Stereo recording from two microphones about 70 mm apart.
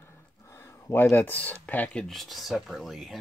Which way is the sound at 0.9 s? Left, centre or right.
Left.